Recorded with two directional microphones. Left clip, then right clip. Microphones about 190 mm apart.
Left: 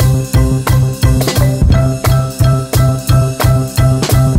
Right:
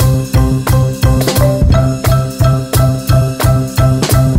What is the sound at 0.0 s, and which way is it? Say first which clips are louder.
Music: right 1 dB; centre (ahead or behind).